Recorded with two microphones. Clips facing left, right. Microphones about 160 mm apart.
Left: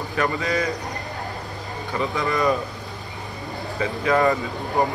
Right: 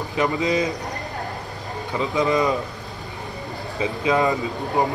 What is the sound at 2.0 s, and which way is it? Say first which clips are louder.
Speech: right 3 dB; 20° right (ahead or behind).